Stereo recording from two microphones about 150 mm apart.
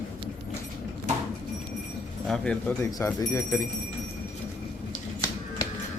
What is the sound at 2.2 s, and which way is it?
Speech, 5° left (ahead or behind).